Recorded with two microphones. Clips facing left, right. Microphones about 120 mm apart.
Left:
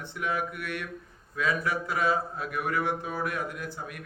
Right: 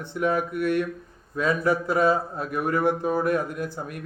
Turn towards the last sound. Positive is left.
turn(degrees=-40)  # may be behind; listen again after turning